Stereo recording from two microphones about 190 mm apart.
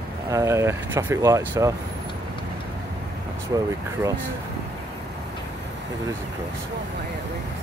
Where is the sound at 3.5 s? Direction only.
20° right (ahead or behind).